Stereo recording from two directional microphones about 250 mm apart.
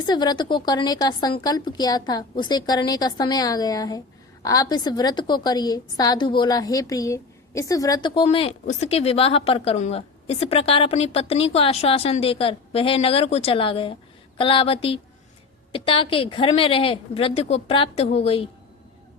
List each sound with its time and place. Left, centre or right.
0.0 s a woman's voice: centre